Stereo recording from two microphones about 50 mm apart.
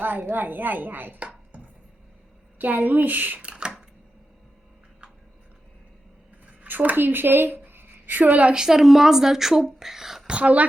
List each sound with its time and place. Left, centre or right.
0.0 s speech: right
1.2 s chopping: right
2.6 s speech: right
3.5 s typewriter: centre
6.7 s a woman's voice: right
8.5 s speech: centre
10.2 s speech: right